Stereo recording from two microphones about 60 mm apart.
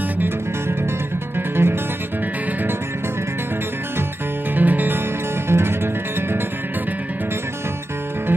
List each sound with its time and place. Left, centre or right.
1.6 s music: right
4.6 s music: right
5.5 s music: right